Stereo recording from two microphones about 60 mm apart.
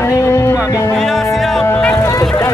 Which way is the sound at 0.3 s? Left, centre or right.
Left.